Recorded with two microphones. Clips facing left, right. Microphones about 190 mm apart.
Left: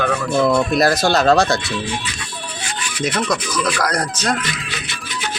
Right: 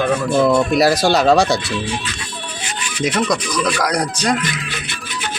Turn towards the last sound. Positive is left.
turn(degrees=-10)  # may be behind; listen again after turning